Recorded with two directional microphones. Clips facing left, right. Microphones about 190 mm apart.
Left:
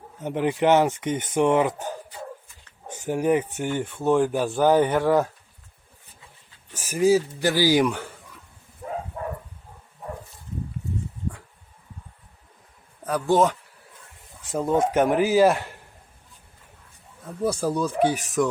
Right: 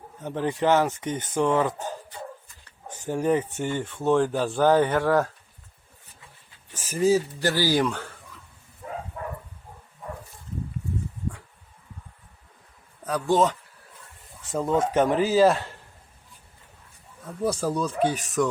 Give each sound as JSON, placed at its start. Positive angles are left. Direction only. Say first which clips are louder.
{"t": 0.2, "sound": "speech", "louder": "left 3 dB", "side_deg": 20}
{"t": 2.9, "sound": "speech", "louder": "left 2 dB", "side_deg": 15}
{"t": 6.7, "sound": "speech", "louder": "left 2 dB", "side_deg": 10}
{"t": 13.1, "sound": "speech", "louder": "left 2 dB", "side_deg": 10}
{"t": 17.4, "sound": "speech", "louder": "left 2 dB", "side_deg": 5}